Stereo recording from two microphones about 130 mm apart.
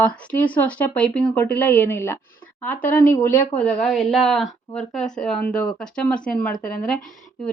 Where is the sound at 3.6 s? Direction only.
5° left (ahead or behind).